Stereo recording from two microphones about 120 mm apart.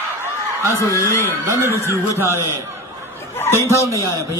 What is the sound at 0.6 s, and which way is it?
Speech, 25° right (ahead or behind).